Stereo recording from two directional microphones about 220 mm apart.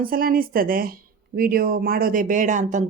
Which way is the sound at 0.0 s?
40° right (ahead or behind).